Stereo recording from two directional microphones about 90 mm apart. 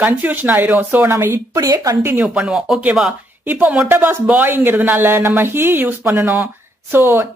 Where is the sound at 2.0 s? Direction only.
25° right (ahead or behind).